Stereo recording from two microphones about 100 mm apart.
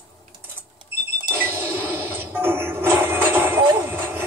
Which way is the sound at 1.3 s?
25° right (ahead or behind).